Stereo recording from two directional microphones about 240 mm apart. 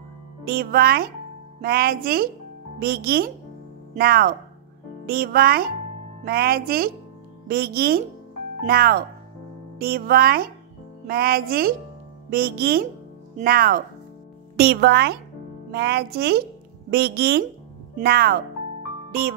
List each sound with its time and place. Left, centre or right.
0.5 s speech: right